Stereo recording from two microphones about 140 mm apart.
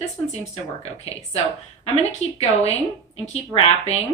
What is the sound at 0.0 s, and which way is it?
A woman's voice, 50° left (ahead or behind).